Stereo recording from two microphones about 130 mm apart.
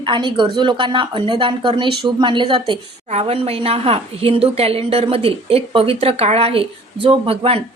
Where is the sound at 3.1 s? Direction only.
50° right (ahead or behind).